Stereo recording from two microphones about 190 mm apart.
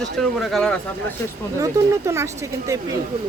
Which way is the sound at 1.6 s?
15° right (ahead or behind).